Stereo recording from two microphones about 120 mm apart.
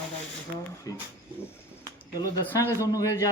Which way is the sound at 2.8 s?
30° left (ahead or behind).